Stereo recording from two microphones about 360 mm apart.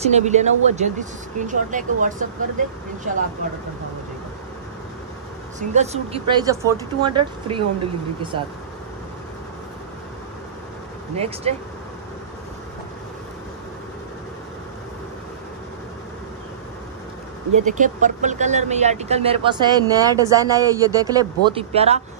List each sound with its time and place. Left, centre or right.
0.0 s speech: centre
5.6 s speech: centre
11.1 s speech: centre
17.6 s speech: right